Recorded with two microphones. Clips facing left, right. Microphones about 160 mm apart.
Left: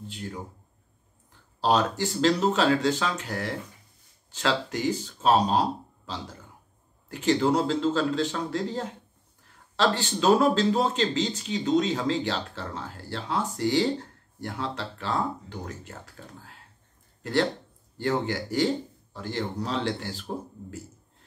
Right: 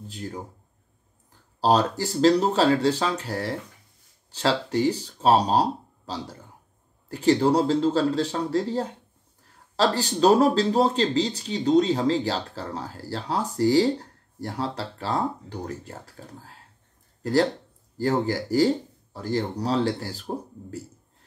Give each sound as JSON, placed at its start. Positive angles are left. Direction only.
{"t": 0.1, "sound": "speech", "side_deg": -40}
{"t": 1.6, "sound": "speech", "side_deg": -35}